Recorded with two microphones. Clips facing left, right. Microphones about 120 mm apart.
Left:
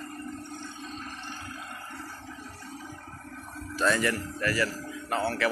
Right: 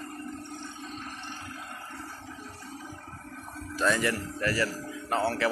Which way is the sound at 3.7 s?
15° right (ahead or behind).